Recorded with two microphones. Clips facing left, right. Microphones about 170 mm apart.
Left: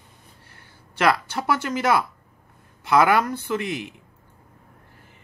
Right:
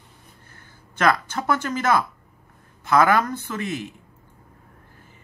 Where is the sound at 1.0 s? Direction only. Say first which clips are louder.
Even; 10° left (ahead or behind).